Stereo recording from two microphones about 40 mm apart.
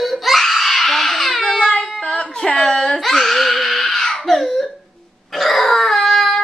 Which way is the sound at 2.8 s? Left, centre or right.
Centre.